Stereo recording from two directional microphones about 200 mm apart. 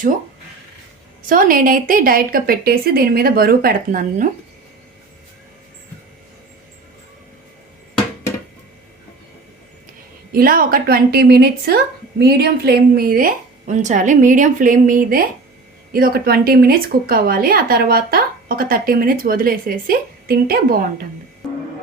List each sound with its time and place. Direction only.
1.3 s a woman's voice: 45° right (ahead or behind)
10.3 s a woman's voice: 45° right (ahead or behind)